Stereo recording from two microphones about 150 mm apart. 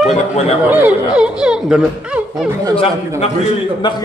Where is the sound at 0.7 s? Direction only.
10° right (ahead or behind).